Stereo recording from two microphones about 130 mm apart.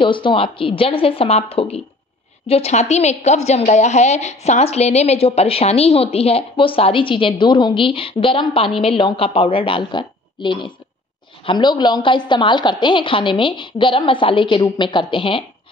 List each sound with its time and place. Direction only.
0.0 s a woman's voice: 40° left (ahead or behind)